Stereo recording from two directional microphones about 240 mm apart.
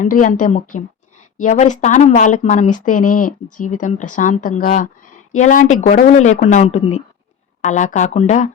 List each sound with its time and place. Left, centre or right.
0.0 s speech: left